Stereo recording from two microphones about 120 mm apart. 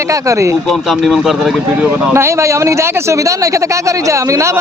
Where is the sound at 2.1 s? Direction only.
20° right (ahead or behind).